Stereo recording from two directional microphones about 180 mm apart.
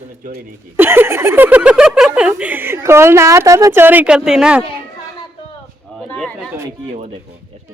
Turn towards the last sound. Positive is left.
turn(degrees=5)  # may be behind; listen again after turning